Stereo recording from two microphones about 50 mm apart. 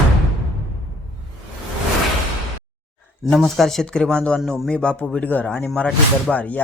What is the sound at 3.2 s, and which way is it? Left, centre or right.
Speech, centre.